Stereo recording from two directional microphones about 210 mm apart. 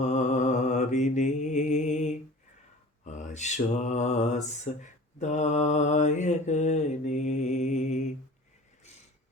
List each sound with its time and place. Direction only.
0.0 s mantra: 35° left (ahead or behind)